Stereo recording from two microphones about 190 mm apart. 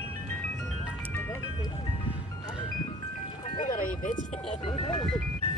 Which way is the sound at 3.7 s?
45° left (ahead or behind).